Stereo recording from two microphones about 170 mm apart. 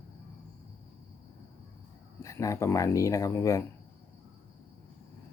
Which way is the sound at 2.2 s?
15° left (ahead or behind).